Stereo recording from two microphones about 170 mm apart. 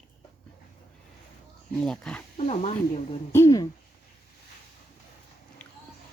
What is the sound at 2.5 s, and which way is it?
Speech, 40° left (ahead or behind).